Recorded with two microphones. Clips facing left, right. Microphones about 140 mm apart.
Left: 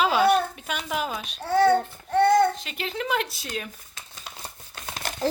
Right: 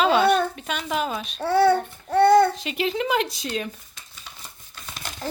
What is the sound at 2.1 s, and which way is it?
Babbling, 70° right (ahead or behind).